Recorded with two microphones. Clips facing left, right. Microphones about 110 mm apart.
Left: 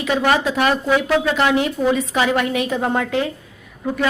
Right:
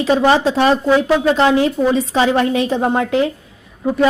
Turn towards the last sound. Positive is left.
turn(degrees=-25)  # may be behind; listen again after turning